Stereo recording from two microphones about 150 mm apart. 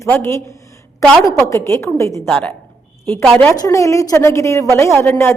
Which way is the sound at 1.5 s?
15° left (ahead or behind).